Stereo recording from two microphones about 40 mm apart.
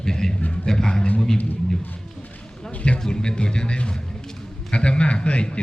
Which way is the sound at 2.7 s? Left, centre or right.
Left.